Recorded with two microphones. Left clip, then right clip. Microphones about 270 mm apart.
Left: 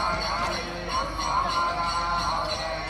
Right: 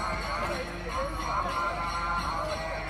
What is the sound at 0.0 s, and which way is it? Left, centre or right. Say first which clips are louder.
Music: left 5 dB; left.